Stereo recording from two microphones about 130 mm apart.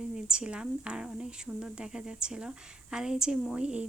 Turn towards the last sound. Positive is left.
turn(degrees=-5)  # may be behind; listen again after turning